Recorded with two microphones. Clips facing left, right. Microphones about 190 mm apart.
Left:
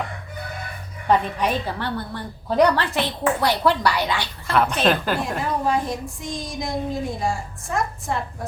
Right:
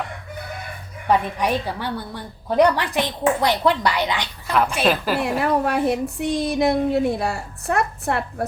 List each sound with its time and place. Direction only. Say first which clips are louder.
1.0 s a woman's voice: even; 10° right (ahead or behind)
5.4 s speech: right 3 dB; 65° right (ahead or behind)